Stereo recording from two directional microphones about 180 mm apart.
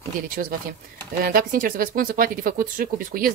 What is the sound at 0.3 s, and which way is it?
Speech, 50° right (ahead or behind).